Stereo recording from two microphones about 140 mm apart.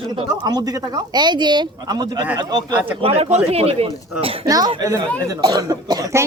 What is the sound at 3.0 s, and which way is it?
Speech, 45° right (ahead or behind).